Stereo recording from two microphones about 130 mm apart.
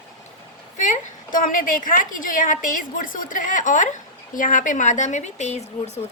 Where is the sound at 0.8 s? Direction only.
85° left.